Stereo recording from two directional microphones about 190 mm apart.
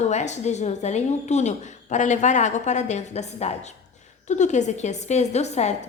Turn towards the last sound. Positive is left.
turn(degrees=35)  # may be behind; listen again after turning